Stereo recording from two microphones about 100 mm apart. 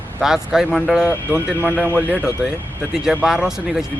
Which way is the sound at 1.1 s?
20° left (ahead or behind).